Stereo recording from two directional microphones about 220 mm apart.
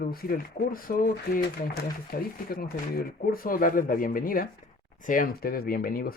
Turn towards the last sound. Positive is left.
turn(degrees=40)  # may be behind; listen again after turning